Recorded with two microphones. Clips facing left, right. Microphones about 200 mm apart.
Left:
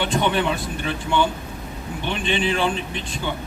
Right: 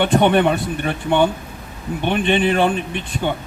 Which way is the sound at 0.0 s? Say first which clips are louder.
Right 7 dB; 60° right (ahead or behind).